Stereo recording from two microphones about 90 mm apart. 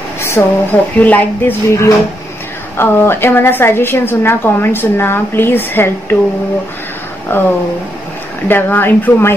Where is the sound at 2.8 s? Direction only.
25° left (ahead or behind).